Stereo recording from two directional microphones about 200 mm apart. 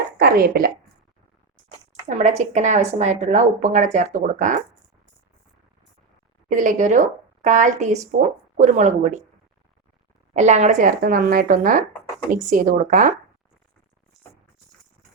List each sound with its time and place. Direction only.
0.2 s a woman's voice: 50° right (ahead or behind)
2.0 s a woman's voice: 35° right (ahead or behind)
6.5 s a woman's voice: 40° right (ahead or behind)
10.3 s a woman's voice: 35° right (ahead or behind)